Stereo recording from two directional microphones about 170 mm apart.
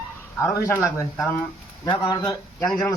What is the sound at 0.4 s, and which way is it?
Speech, 15° left (ahead or behind).